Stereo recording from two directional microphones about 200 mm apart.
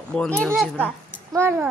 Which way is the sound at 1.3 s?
10° right (ahead or behind).